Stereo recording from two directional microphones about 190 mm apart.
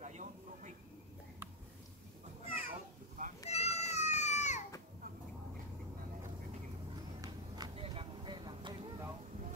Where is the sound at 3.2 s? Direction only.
45° right (ahead or behind).